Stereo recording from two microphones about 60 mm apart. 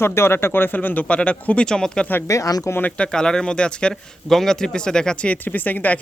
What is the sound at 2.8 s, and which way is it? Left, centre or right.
Speech, centre.